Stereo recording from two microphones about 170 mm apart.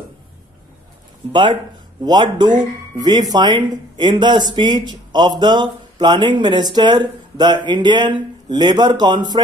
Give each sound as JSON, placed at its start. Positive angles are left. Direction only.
{"t": 1.3, "sound": "speech", "side_deg": -25}